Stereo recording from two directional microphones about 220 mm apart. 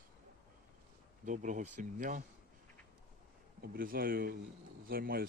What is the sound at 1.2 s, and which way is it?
Speech, 35° right (ahead or behind).